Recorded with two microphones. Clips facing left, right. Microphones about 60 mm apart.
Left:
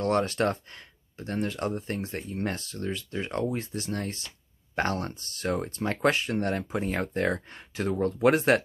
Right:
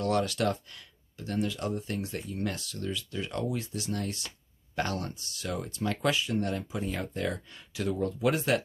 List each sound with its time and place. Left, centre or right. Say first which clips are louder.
0.0 s speech: left 3 dB; left